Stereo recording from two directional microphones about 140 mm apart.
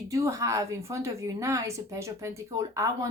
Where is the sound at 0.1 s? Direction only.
20° right (ahead or behind).